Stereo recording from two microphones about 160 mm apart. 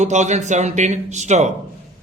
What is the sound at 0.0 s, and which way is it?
A man's voice, 45° right (ahead or behind).